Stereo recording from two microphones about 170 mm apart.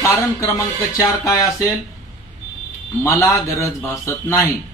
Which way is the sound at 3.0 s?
20° left (ahead or behind).